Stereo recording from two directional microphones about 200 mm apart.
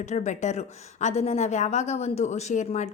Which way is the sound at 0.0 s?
35° left (ahead or behind).